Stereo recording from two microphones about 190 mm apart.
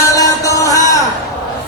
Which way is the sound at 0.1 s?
15° left (ahead or behind).